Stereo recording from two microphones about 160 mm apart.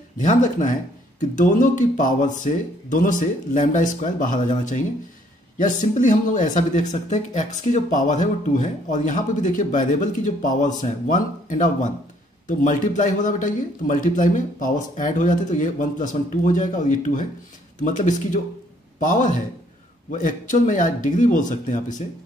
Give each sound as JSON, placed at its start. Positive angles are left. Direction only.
{"t": 0.2, "sound": "speech", "side_deg": 50}
{"t": 5.9, "sound": "speech", "side_deg": 55}